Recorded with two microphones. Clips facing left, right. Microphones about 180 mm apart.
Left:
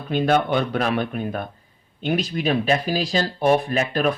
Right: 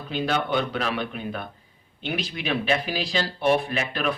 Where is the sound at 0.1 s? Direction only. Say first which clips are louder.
Left 6 dB; 50° left (ahead or behind).